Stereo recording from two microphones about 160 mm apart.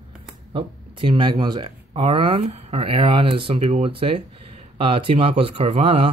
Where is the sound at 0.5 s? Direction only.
30° right (ahead or behind).